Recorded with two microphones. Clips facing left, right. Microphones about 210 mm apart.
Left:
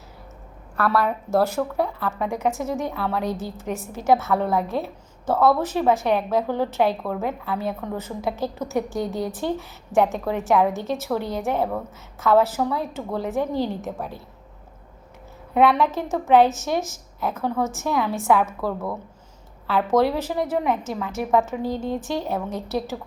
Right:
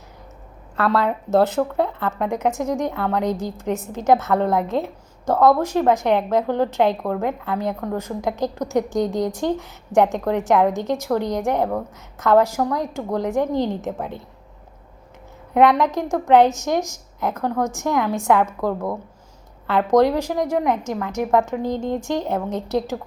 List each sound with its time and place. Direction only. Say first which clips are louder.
0.8 s a woman's voice: right 2 dB; 20° right (ahead or behind)
15.5 s a woman's voice: right 2 dB; 15° right (ahead or behind)